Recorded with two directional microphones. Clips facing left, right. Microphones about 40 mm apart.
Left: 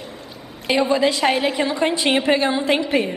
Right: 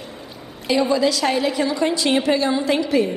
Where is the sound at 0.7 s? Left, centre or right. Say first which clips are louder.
Even; left.